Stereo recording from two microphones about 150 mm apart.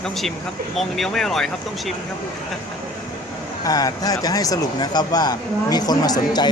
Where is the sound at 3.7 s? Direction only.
25° left (ahead or behind).